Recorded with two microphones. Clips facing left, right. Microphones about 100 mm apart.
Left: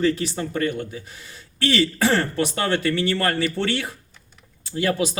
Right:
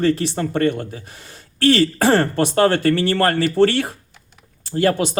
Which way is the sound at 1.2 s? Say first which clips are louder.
Right 9 dB; 50° right (ahead or behind).